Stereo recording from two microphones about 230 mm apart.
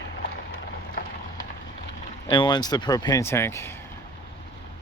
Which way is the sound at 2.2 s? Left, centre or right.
Left.